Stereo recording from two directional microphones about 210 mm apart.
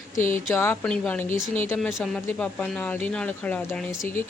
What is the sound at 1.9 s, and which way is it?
Speech, centre (ahead or behind).